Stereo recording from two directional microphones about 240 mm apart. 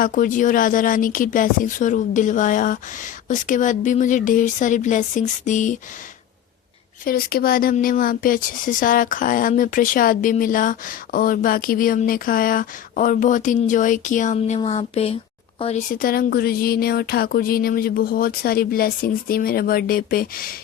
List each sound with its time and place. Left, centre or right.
0.0 s speech: left
7.0 s speech: left
15.9 s speech: left